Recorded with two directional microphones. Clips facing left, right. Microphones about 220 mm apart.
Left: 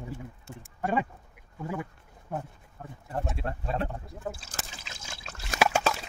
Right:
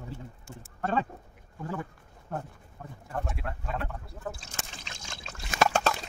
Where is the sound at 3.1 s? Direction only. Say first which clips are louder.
Left 2 dB; 30° left (ahead or behind).